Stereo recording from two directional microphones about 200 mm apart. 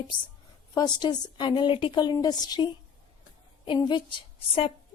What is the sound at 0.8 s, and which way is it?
A woman's voice, 20° left (ahead or behind).